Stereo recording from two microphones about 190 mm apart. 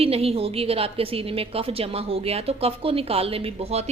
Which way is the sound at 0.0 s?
30° right (ahead or behind).